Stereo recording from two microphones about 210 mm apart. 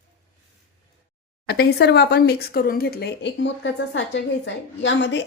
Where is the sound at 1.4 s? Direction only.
50° left (ahead or behind).